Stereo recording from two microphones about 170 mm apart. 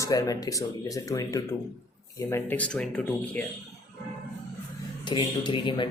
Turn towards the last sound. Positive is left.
turn(degrees=30)  # may be behind; listen again after turning